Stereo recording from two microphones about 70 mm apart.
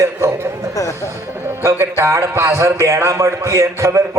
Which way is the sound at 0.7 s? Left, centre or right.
Left.